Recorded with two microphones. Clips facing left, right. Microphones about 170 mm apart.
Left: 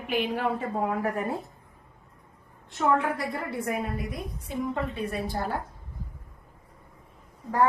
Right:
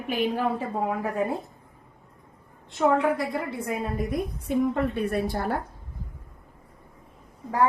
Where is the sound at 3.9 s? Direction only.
55° right (ahead or behind).